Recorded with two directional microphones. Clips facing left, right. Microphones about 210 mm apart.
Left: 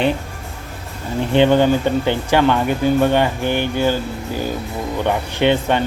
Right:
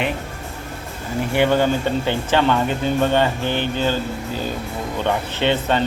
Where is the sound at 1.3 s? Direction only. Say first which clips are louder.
Left 4 dB; 20° left (ahead or behind).